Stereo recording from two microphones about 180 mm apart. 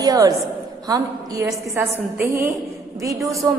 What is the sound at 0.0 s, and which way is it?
A woman's voice, 20° right (ahead or behind).